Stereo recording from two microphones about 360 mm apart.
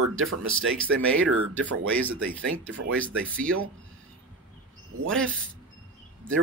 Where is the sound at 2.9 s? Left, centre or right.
Centre.